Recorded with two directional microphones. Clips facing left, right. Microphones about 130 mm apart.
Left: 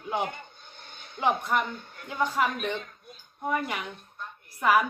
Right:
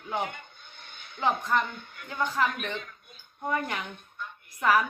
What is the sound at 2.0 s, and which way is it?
Speech, 15° left (ahead or behind).